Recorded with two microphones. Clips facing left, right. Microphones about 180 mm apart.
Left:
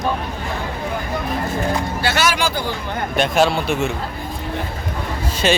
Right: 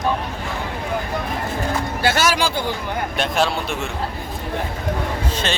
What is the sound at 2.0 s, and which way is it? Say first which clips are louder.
Speech: right 2 dB; 35° right (ahead or behind).